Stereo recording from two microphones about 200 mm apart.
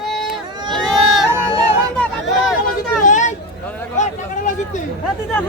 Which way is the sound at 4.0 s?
40° left (ahead or behind).